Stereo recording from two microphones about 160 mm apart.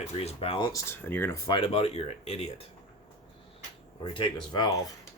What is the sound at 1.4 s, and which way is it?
Speech, 30° left (ahead or behind).